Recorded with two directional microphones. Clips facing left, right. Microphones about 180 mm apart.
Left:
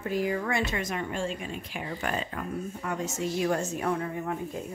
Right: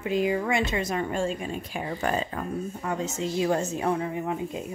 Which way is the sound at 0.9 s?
45° right (ahead or behind).